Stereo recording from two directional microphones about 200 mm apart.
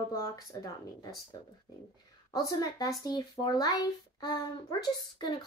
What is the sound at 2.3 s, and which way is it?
Speech, 20° left (ahead or behind).